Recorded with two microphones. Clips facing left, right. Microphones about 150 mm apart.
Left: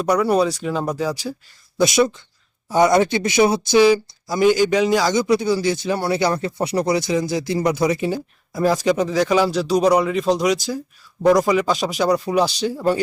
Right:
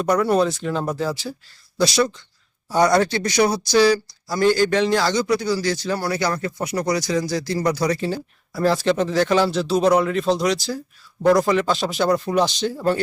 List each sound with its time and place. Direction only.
0.0 s speech: 10° left (ahead or behind)
5.2 s speech: 25° left (ahead or behind)